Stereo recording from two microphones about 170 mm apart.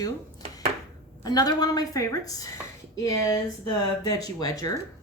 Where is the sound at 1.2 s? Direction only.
25° left (ahead or behind).